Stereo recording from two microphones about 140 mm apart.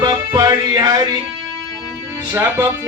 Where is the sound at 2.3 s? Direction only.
15° right (ahead or behind).